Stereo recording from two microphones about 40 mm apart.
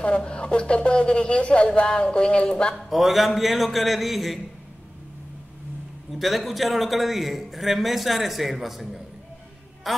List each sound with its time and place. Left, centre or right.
0.0 s a man's voice: left
2.7 s a man's voice: centre
6.1 s a man's voice: centre